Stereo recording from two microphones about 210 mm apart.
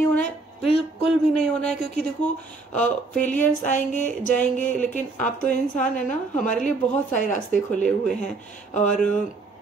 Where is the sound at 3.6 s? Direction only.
40° left (ahead or behind).